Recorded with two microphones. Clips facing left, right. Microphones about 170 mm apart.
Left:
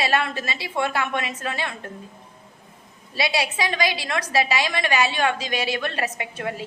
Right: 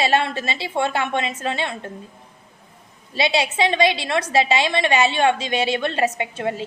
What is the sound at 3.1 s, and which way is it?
A woman's voice, 25° right (ahead or behind).